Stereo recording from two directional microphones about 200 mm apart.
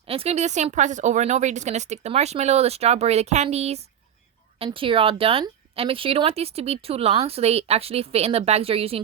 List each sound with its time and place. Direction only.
0.1 s speech: 30° right (ahead or behind)